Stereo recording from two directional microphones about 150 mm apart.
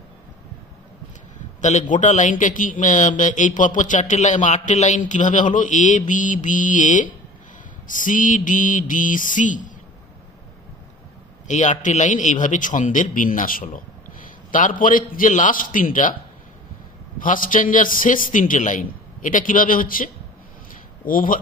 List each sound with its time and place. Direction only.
1.6 s a man's voice: 55° left (ahead or behind)
11.4 s a man's voice: 55° left (ahead or behind)
17.2 s a man's voice: 65° left (ahead or behind)